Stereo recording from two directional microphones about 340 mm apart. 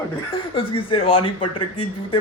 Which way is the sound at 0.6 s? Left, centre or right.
Centre.